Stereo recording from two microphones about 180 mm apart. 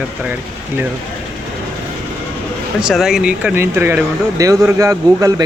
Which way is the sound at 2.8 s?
5° right (ahead or behind).